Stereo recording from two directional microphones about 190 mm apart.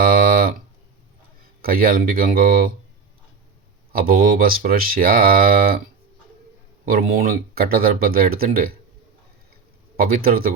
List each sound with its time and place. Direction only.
0.0 s a sound: 50° right (ahead or behind)
1.6 s speech: 50° right (ahead or behind)
3.9 s speech: 50° right (ahead or behind)
6.8 s speech: 50° right (ahead or behind)
10.0 s speech: 50° right (ahead or behind)